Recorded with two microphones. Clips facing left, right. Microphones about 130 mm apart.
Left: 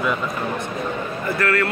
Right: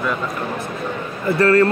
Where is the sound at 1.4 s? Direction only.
30° right (ahead or behind).